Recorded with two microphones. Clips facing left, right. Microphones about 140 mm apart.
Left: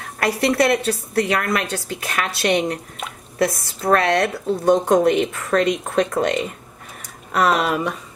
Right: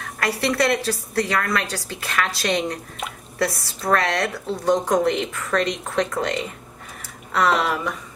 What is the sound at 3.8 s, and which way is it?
Speech, 20° left (ahead or behind).